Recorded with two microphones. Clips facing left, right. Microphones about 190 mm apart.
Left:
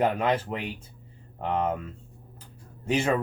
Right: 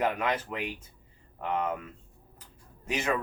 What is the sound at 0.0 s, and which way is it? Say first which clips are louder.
Speech: left 4 dB; 30° left (ahead or behind).